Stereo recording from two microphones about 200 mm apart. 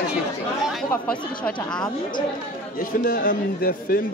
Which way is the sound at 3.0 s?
45° left (ahead or behind).